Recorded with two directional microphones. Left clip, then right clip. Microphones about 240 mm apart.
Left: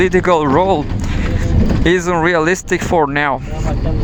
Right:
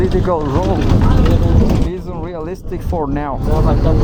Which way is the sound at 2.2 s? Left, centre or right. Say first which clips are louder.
Left 12 dB; left.